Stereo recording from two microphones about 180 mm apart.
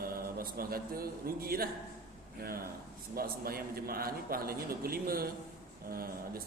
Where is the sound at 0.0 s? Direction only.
55° right (ahead or behind).